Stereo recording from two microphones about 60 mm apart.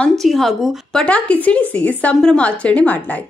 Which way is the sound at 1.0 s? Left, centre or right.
Left.